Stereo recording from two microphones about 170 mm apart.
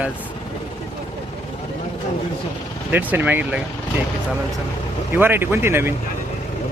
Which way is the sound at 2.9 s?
10° right (ahead or behind).